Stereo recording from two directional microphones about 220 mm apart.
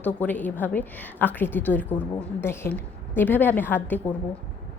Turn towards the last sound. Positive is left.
turn(degrees=10)  # may be behind; listen again after turning